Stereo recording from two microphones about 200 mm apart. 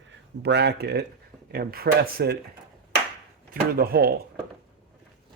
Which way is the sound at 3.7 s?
50° right (ahead or behind).